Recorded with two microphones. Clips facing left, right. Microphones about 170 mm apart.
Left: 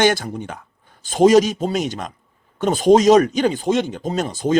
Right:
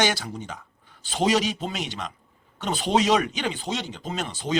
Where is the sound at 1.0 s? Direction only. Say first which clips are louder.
Left 10 dB; 45° left (ahead or behind).